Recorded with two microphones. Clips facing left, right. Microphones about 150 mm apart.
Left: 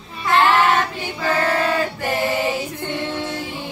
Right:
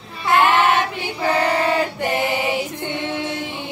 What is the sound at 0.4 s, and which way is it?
Child singing, 15° right (ahead or behind).